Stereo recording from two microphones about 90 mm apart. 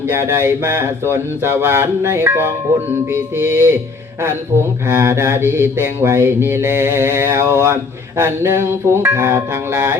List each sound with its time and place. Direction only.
0.1 s mantra: 30° right (ahead or behind)
4.9 s mantra: 30° right (ahead or behind)